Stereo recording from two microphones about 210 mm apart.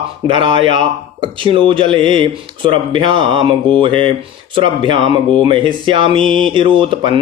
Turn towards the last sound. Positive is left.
turn(degrees=-25)  # may be behind; listen again after turning